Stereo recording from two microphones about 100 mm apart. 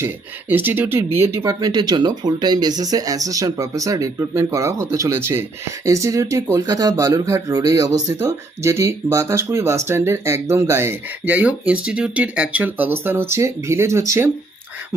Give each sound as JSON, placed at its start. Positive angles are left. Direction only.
{"t": 0.0, "sound": "speech", "side_deg": -20}
{"t": 1.5, "sound": "speech", "side_deg": -40}